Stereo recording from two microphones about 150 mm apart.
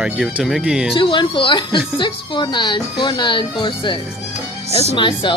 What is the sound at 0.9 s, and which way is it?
Speech, 35° left (ahead or behind).